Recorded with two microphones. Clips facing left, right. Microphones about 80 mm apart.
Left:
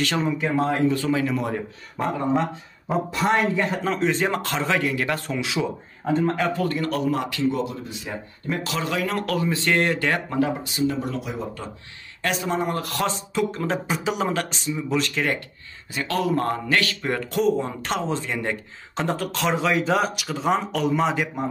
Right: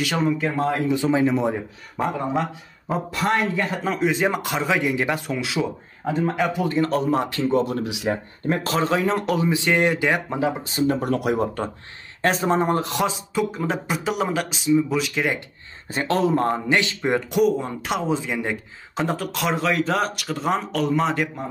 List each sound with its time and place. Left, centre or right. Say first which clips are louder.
0.0 s speech: right 2 dB; centre
0.9 s speech: right 3 dB; right
2.0 s speech: left 1 dB; centre
5.2 s speech: right 1 dB; centre
6.8 s a man's voice: right 3 dB; right
7.7 s speech: right 8 dB; right
8.5 s speech: right 5 dB; right; by 10.5 s centre
10.6 s speech: right 2 dB; right
12.2 s a man's voice: right 4 dB; right
12.9 s speech: right 2 dB; centre
15.9 s speech: right 3 dB; right
17.4 s speech: even; centre